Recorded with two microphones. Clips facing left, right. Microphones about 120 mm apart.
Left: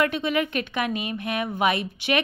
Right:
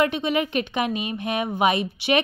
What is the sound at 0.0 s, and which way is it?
A woman's voice, 20° right (ahead or behind).